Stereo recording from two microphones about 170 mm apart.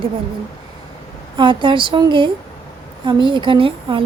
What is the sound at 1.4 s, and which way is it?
Speech, 30° right (ahead or behind).